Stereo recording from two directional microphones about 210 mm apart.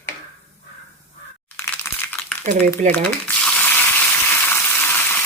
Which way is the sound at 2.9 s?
5° left (ahead or behind).